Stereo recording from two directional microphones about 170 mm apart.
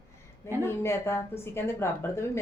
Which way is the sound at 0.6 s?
15° left (ahead or behind).